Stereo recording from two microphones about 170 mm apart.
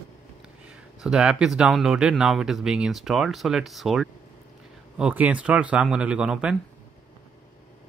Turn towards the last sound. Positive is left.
turn(degrees=-5)  # may be behind; listen again after turning